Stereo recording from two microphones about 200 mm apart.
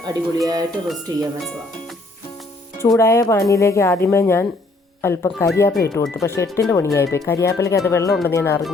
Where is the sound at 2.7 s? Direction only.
15° left (ahead or behind).